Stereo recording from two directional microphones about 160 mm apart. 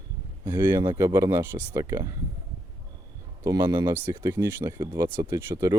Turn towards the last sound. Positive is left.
turn(degrees=-20)  # may be behind; listen again after turning